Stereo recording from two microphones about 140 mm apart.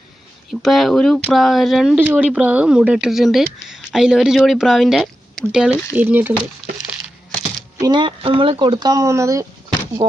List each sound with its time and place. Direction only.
0.6 s speech: centre (ahead or behind)
2.0 s speech: 10° right (ahead or behind)
7.8 s speech: 35° right (ahead or behind)
10.0 s speech: 35° right (ahead or behind)